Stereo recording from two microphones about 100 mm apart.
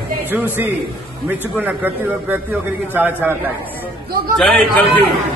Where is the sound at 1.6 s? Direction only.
20° right (ahead or behind).